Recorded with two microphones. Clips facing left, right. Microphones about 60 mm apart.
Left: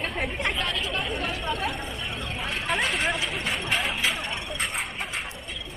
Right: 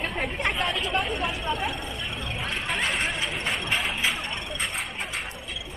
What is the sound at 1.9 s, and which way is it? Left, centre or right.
Vehicle, centre.